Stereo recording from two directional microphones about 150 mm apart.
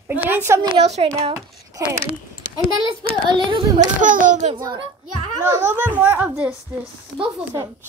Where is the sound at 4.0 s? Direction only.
60° right (ahead or behind).